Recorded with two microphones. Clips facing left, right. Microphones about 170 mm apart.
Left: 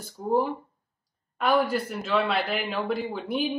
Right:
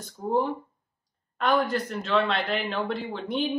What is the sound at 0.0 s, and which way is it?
A woman's voice, 5° left (ahead or behind).